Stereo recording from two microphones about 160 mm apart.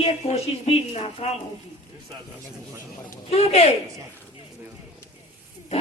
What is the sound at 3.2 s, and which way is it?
Speech, 40° left (ahead or behind).